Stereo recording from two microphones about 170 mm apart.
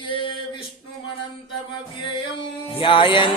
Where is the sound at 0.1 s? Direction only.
30° left (ahead or behind).